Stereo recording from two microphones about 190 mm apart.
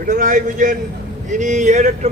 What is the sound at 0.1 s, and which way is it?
A man's voice, 45° right (ahead or behind).